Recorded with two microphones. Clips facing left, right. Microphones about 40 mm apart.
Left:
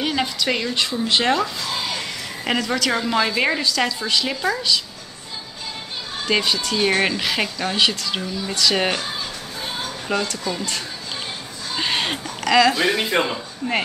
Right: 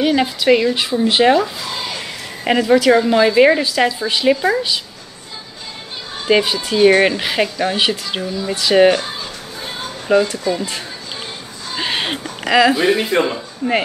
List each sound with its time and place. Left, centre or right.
0.0 s a woman's voice: centre
6.2 s speech: centre
13.1 s speech: centre